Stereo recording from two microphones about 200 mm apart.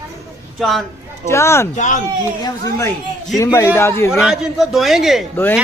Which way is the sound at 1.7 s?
40° left (ahead or behind).